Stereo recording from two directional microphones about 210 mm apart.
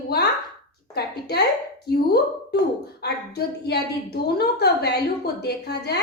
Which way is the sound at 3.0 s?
50° left (ahead or behind).